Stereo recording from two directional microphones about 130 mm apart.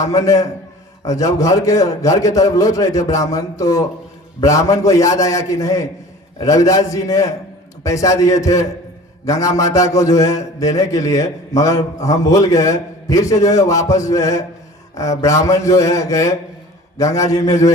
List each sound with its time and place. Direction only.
0.1 s a man's voice: 25° left (ahead or behind)